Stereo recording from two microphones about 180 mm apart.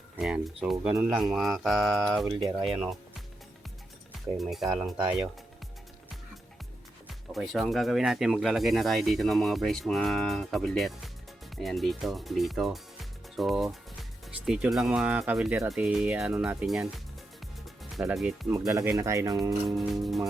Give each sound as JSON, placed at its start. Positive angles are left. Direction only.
{"t": 0.2, "sound": "speech", "side_deg": -5}
{"t": 4.4, "sound": "speech", "side_deg": 0}
{"t": 7.1, "sound": "speech", "side_deg": 0}
{"t": 18.1, "sound": "speech", "side_deg": -5}
{"t": 18.7, "sound": "speech", "side_deg": -20}
{"t": 19.6, "sound": "speech", "side_deg": 0}